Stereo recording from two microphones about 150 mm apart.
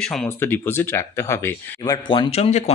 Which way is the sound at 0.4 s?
15° left (ahead or behind).